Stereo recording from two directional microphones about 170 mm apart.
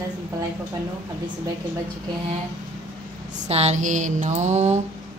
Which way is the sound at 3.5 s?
40° right (ahead or behind).